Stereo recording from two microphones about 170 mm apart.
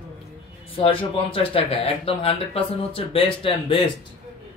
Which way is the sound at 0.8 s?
30° left (ahead or behind).